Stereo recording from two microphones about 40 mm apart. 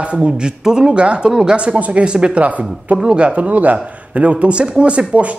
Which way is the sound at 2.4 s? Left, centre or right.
Right.